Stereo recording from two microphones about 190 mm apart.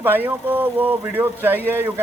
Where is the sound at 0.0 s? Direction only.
10° right (ahead or behind).